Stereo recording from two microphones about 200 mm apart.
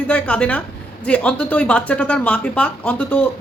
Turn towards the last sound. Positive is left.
turn(degrees=5)  # may be behind; listen again after turning